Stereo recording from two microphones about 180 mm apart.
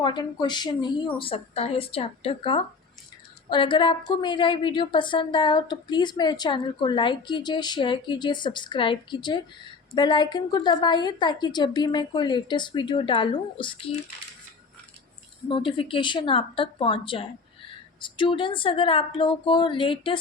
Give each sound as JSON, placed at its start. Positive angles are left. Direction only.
{"t": 0.0, "sound": "a woman's voice", "side_deg": 25}
{"t": 15.4, "sound": "a woman's voice", "side_deg": 30}